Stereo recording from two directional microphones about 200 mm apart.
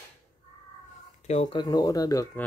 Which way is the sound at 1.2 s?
35° left (ahead or behind).